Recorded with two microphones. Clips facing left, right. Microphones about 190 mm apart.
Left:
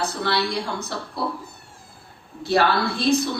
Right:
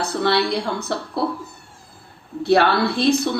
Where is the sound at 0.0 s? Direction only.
60° right (ahead or behind).